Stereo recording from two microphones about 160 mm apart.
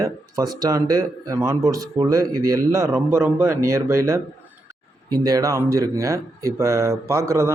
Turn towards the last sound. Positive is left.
turn(degrees=-15)  # may be behind; listen again after turning